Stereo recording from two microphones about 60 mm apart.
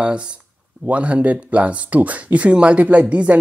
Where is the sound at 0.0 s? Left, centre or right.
Centre.